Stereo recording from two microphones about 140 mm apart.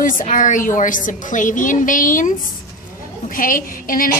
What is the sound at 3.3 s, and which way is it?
Speech, 80° left.